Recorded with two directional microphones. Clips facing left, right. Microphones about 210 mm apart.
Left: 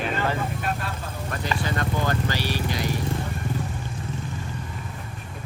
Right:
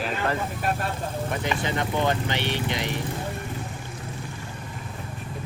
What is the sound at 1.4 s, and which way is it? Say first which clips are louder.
Speech: left 2 dB; 20° right (ahead or behind).